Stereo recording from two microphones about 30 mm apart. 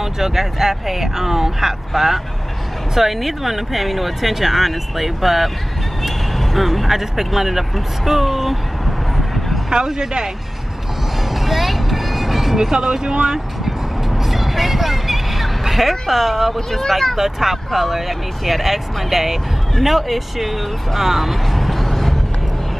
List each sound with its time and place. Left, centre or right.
0.0 s speech: centre
6.0 s a sound: centre
6.9 s speech: centre
9.1 s vehicle: centre
11.2 s music: centre
12.7 s speech: right
13.7 s music: centre
16.5 s speech: centre
17.2 s speech: centre